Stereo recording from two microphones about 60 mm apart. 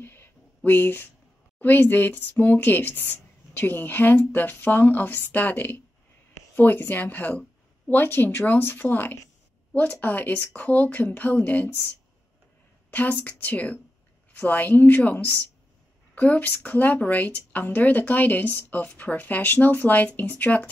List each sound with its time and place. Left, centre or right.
0.0 s a sound: left
0.7 s a woman's voice: left
12.9 s a woman's voice: left